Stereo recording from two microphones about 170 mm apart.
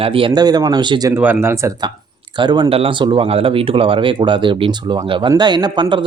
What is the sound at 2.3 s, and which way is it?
Speech, 25° right (ahead or behind).